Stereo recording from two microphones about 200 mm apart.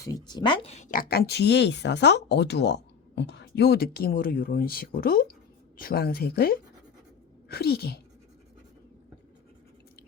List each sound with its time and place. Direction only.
0.0 s speech: 20° left (ahead or behind); by 8.0 s 50° left (ahead or behind)